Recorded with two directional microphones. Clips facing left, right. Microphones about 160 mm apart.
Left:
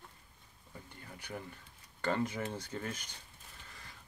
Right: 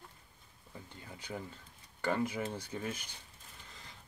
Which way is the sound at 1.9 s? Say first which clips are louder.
Right 1 dB; 10° right (ahead or behind).